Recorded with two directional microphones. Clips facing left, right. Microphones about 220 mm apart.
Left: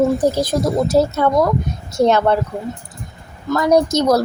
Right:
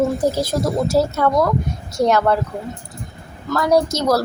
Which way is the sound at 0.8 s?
20° left (ahead or behind).